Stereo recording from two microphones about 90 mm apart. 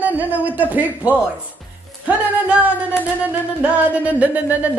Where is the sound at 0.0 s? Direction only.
20° right (ahead or behind).